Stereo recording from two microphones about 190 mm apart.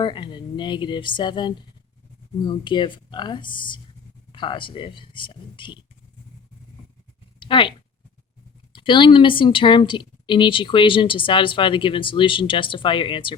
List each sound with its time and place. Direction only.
0.0 s a woman's voice: 25° left (ahead or behind)
7.3 s a sound: 25° left (ahead or behind)
8.7 s a woman's voice: 25° left (ahead or behind)